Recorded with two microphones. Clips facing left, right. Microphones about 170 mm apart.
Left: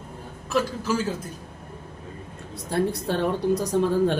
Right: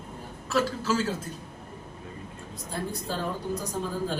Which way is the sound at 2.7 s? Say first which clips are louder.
Left 9 dB; 75° left (ahead or behind).